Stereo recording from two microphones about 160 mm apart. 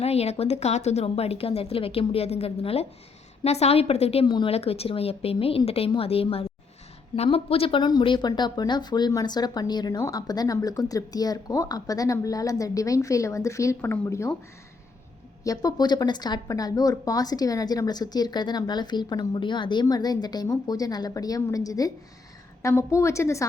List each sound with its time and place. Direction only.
0.0 s a woman's voice: 40° left (ahead or behind); by 14.3 s 15° left (ahead or behind)
15.4 s a woman's voice: 25° left (ahead or behind)